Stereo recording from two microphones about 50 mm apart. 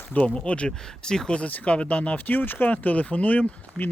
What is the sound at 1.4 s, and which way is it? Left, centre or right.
Speech, left.